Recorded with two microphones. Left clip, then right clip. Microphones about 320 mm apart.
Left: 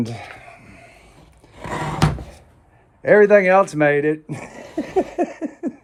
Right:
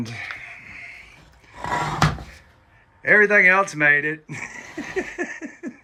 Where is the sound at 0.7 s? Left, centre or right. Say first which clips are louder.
Right 7 dB; left.